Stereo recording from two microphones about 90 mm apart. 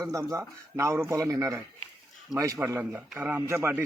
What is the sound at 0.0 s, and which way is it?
Speech, 35° right (ahead or behind).